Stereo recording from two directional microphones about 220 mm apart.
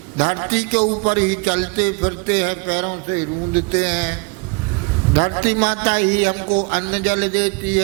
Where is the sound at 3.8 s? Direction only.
10° right (ahead or behind).